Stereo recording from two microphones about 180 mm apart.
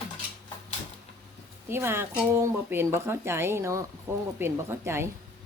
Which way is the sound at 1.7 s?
15° right (ahead or behind).